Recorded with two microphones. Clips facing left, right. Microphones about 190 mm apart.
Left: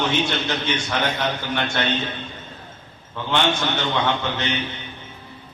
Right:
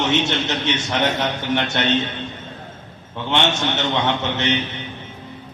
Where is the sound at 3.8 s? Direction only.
25° right (ahead or behind).